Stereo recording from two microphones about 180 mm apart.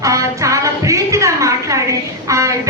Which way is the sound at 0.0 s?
20° right (ahead or behind).